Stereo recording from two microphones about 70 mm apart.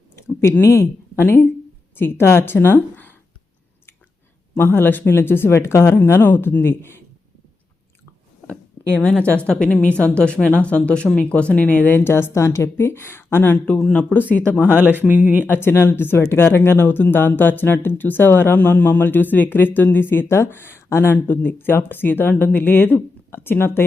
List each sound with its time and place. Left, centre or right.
0.6 s speech: left
4.5 s speech: left
9.0 s a woman's voice: centre
14.6 s speech: right
15.4 s speech: left